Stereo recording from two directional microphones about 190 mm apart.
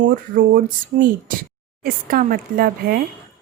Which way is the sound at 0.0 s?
45° right (ahead or behind).